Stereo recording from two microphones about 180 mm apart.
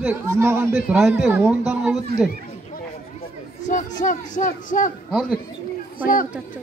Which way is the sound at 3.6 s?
45° left (ahead or behind).